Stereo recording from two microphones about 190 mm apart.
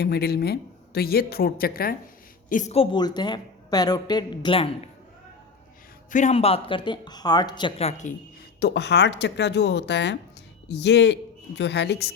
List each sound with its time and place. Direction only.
0.0 s speech: 55° left (ahead or behind)
2.5 s a woman's voice: 40° left (ahead or behind)
6.1 s a woman's voice: 40° left (ahead or behind)
8.6 s speech: 65° left (ahead or behind)